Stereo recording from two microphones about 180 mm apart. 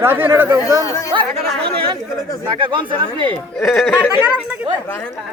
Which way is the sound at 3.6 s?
Centre (ahead or behind).